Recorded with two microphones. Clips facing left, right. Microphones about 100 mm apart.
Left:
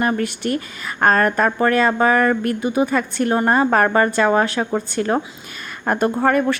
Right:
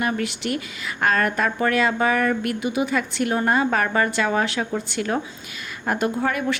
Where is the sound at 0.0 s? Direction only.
40° left (ahead or behind).